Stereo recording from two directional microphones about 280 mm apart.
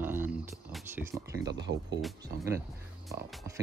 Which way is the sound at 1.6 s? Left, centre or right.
Right.